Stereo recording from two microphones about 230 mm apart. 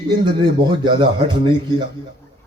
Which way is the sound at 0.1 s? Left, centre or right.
Centre.